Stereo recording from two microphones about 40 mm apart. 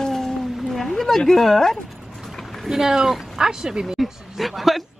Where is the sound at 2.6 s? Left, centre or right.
Centre.